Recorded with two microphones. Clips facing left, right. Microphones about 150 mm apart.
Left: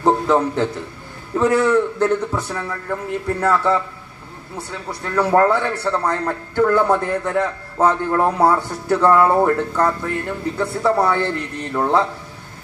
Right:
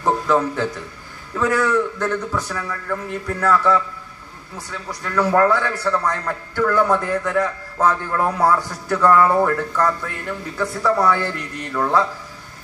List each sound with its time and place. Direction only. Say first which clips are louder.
0.0 s a man's voice: left 2 dB; 30° left (ahead or behind)